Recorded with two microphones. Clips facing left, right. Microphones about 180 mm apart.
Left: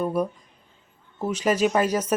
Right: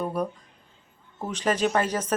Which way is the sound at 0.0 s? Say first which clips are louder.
Left 3 dB; 10° left (ahead or behind).